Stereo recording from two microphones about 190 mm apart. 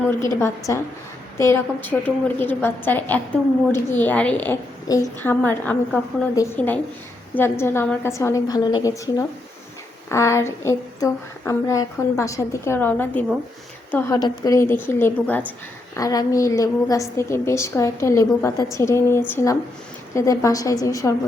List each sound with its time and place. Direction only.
0.2 s a woman's voice: 15° left (ahead or behind)